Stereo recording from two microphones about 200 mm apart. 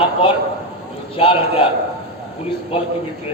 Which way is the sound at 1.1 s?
25° left (ahead or behind).